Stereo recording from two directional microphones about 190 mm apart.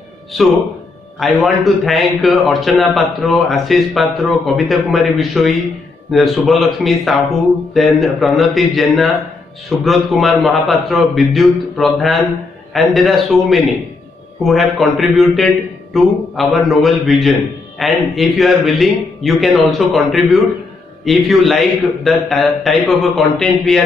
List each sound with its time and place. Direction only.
0.3 s a man's voice: centre (ahead or behind)